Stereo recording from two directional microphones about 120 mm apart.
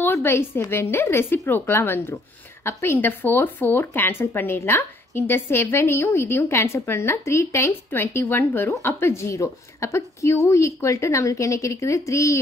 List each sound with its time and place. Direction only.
0.0 s speech: 20° left (ahead or behind)